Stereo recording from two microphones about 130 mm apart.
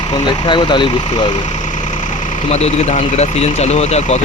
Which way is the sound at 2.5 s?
60° left (ahead or behind).